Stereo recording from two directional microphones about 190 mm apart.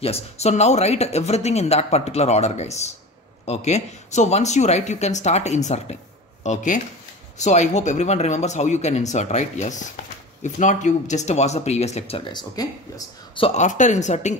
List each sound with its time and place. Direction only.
0.0 s speech: 35° left (ahead or behind)
12.3 s speech: 20° left (ahead or behind)
13.6 s speech: 40° left (ahead or behind)